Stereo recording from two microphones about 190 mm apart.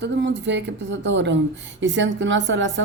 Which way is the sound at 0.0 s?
70° right (ahead or behind).